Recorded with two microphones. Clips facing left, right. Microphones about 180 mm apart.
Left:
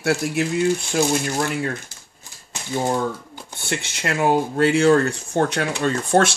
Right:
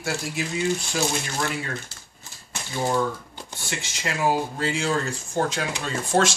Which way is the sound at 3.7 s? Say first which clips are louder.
Left 6 dB; 60° left (ahead or behind).